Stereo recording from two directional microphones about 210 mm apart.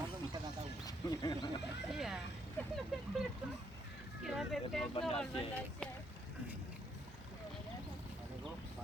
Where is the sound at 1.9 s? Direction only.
Centre (ahead or behind).